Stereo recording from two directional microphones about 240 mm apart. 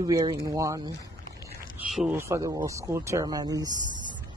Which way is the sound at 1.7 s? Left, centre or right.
Centre.